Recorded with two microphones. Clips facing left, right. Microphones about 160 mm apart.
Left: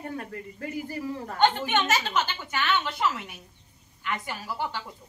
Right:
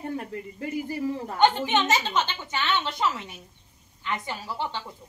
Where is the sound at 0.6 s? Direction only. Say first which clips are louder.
Right 4 dB; 15° right (ahead or behind).